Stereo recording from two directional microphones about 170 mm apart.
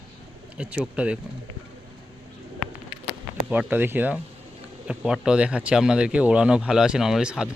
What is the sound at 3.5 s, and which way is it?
Speech, 10° right (ahead or behind).